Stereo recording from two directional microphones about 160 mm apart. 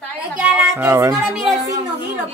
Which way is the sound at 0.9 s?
20° right (ahead or behind).